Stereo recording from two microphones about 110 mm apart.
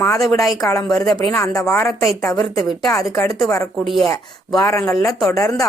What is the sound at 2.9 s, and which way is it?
Speech, 25° left (ahead or behind).